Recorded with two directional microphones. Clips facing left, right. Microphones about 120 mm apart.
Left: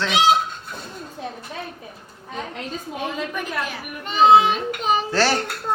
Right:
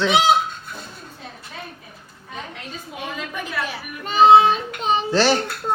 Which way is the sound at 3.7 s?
40° right (ahead or behind).